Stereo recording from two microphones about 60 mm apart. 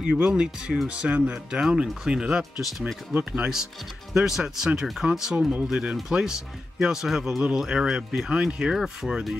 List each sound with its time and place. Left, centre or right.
0.2 s speech: centre
3.1 s speech: right
4.1 s speech: centre